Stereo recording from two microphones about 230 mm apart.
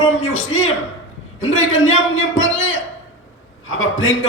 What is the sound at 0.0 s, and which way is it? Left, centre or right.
A man's voice, left.